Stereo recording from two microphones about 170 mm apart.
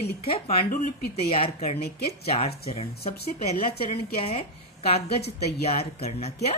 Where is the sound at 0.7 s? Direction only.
50° left (ahead or behind).